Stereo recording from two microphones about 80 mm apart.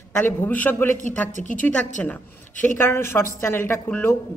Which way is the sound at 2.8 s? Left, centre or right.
Left.